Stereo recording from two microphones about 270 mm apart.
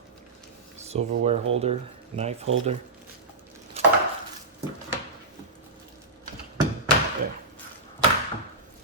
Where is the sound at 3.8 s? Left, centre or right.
Right.